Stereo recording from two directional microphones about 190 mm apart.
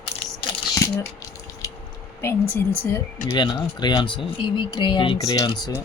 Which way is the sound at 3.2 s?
20° left (ahead or behind).